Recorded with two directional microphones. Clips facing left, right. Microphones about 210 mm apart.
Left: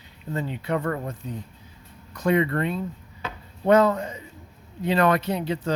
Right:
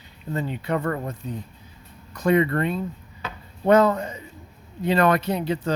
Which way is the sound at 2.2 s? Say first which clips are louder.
Right 2 dB; 45° right (ahead or behind).